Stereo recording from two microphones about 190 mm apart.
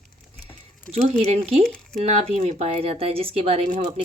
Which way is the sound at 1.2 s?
35° right (ahead or behind).